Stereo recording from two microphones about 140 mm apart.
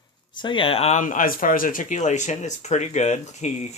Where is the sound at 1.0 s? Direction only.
70° left (ahead or behind); by 3.7 s 50° left (ahead or behind).